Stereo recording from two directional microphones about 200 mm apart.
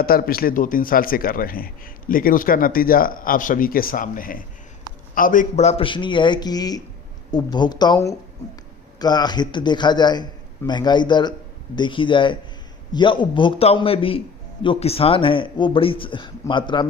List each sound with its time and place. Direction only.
0.0 s speech: 50° left (ahead or behind); by 16.9 s 25° left (ahead or behind)